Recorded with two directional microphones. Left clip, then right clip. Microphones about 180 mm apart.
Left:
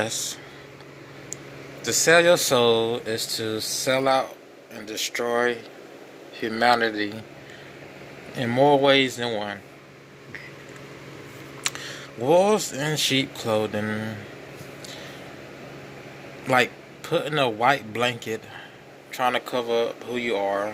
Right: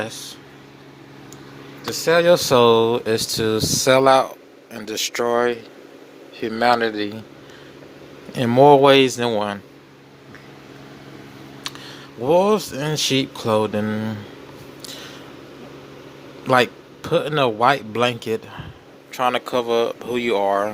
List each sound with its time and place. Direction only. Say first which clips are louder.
0.0 s speech: left 2 dB; centre (ahead or behind)
1.8 s speech: even; 5° right (ahead or behind); by 7.2 s 25° right (ahead or behind)
8.3 s speech: right 7 dB; 30° right (ahead or behind)
11.6 s computer keyboard: left 3 dB; centre (ahead or behind)
12.2 s speech: right 2 dB; 15° right (ahead or behind)
14.8 s a sound: right 5 dB; 40° right (ahead or behind)
16.5 s speech: right 4 dB; 25° right (ahead or behind)